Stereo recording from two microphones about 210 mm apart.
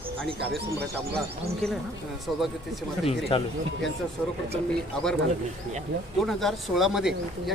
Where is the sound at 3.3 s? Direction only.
25° left (ahead or behind).